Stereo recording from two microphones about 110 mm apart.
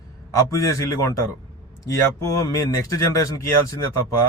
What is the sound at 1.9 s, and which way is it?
A man's voice, 30° left (ahead or behind).